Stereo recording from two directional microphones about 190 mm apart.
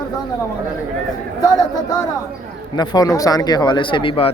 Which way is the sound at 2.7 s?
20° left (ahead or behind).